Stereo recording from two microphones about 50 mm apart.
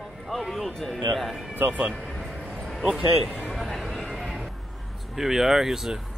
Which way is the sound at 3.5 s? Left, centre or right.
Centre.